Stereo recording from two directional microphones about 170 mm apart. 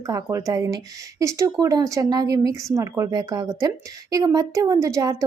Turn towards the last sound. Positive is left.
turn(degrees=-20)  # may be behind; listen again after turning